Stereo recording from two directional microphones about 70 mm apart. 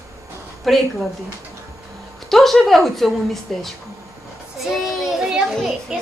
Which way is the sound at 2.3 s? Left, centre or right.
Centre.